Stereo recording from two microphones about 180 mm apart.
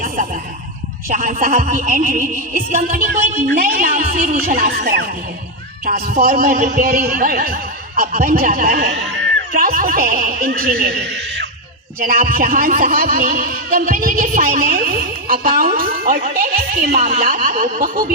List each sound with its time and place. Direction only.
1.0 s speech: 50° right (ahead or behind); by 11.4 s 70° right (ahead or behind)
11.9 s speech: 55° right (ahead or behind)